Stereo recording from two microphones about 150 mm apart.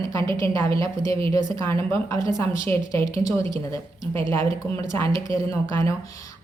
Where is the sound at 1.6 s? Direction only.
20° left (ahead or behind).